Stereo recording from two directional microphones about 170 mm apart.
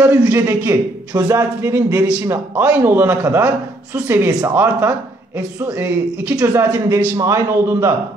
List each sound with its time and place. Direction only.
0.0 s a man's voice: 10° right (ahead or behind)